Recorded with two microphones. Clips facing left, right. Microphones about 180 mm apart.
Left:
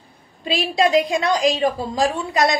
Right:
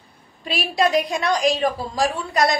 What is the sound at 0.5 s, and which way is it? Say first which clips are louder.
A woman's voice: left 2 dB; 25° left (ahead or behind).